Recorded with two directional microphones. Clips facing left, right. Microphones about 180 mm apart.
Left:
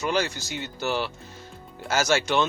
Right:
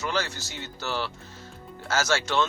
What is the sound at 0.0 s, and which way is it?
Speech, 15° left (ahead or behind).